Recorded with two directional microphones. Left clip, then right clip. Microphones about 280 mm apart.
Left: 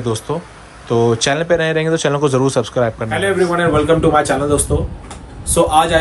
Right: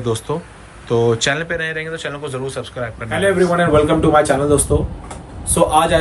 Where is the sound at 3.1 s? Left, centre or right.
Centre.